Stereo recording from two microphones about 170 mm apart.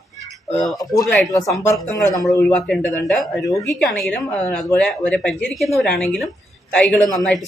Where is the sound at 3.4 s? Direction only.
20° left (ahead or behind).